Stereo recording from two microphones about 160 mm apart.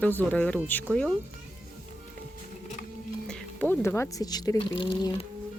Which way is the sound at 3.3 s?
10° left (ahead or behind).